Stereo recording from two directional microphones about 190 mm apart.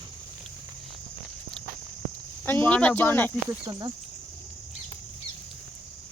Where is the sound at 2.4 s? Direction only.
10° left (ahead or behind).